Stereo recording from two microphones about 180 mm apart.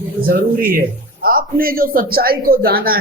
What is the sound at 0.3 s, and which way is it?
A man's voice, 55° right (ahead or behind).